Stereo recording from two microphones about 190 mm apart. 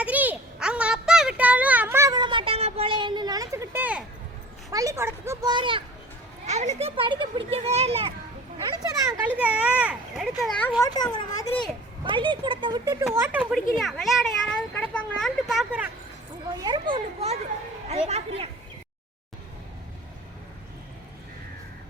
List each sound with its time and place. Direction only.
0.0 s a sound: 10° right (ahead or behind)
4.7 s speech: 15° right (ahead or behind)
6.4 s a child's voice: 35° right (ahead or behind)
9.4 s a child's voice: 5° right (ahead or behind)
10.8 s speech: 20° left (ahead or behind)
12.0 s speech: 25° right (ahead or behind)
13.2 s a child's voice: 5° right (ahead or behind)
16.6 s speech: 20° right (ahead or behind)
16.9 s a child's voice: 30° right (ahead or behind)